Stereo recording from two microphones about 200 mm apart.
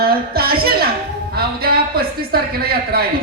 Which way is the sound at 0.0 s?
50° right (ahead or behind).